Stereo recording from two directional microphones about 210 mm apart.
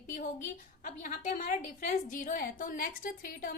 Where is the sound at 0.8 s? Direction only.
40° left (ahead or behind).